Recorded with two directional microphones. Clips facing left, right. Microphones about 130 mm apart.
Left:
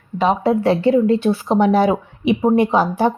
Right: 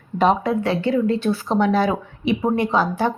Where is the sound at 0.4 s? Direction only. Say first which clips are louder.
Left 5 dB; 30° left (ahead or behind).